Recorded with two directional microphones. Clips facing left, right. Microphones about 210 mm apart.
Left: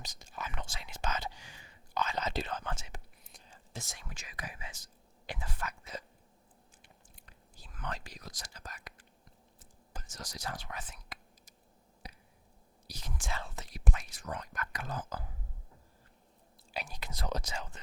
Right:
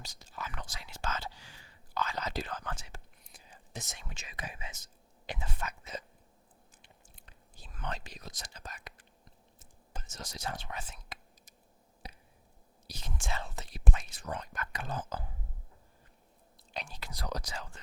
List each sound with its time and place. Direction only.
0.0 s whispering: 20° left (ahead or behind)
3.4 s whispering: 20° right (ahead or behind)
12.0 s a sound: 25° right (ahead or behind)
12.9 s whispering: 25° right (ahead or behind)
16.7 s whispering: 5° left (ahead or behind)
17.0 s speech: 25° left (ahead or behind)